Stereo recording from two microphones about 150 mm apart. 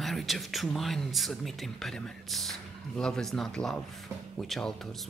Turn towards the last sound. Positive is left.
turn(degrees=5)  # may be behind; listen again after turning